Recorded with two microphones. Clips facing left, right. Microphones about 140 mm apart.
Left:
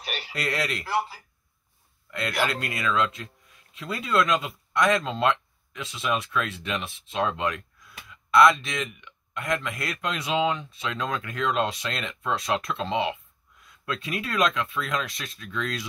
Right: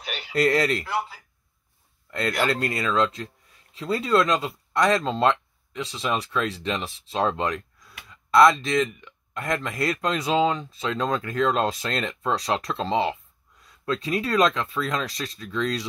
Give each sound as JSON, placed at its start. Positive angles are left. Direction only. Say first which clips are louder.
{"t": 0.0, "sound": "radio", "louder": "even", "side_deg": 0}
{"t": 0.4, "sound": "speech", "louder": "right 9 dB", "side_deg": -40}
{"t": 0.8, "sound": "speech", "louder": "left 1 dB", "side_deg": 5}
{"t": 2.0, "sound": "a sound", "louder": "right 4 dB", "side_deg": -40}
{"t": 2.4, "sound": "speech", "louder": "right 2 dB", "side_deg": -35}